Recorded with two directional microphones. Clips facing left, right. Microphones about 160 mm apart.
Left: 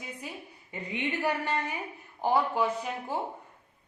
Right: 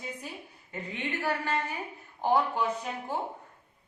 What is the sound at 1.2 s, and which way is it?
Speech, 15° left (ahead or behind).